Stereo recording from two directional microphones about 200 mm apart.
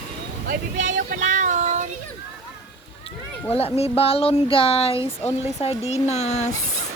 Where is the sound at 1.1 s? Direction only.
40° right (ahead or behind).